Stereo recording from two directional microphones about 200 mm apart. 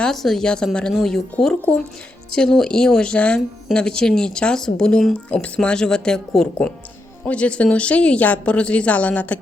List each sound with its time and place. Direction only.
0.0 s a woman's voice: centre (ahead or behind)